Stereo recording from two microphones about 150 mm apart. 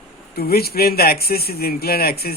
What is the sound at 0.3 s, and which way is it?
A man's voice, 90° left.